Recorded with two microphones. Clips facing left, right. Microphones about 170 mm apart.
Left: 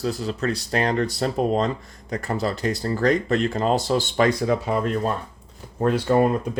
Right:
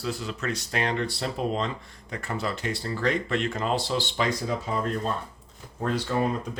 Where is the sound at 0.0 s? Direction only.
40° left (ahead or behind).